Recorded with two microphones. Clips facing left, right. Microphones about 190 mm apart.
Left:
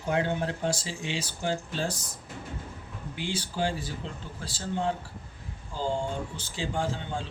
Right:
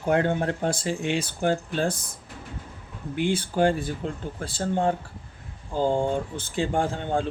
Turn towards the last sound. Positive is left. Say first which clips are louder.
# right 6 dB
turn(degrees=-55)  # may be behind; listen again after turning